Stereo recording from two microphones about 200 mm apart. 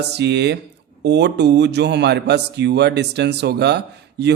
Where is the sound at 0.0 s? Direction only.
55° right (ahead or behind).